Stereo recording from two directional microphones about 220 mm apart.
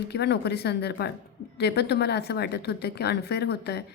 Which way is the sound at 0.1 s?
50° left (ahead or behind).